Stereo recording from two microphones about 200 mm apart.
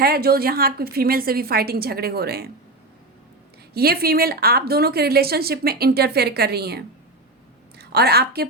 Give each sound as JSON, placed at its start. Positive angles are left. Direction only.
{"t": 0.0, "sound": "a woman's voice", "side_deg": -50}
{"t": 3.8, "sound": "a woman's voice", "side_deg": -50}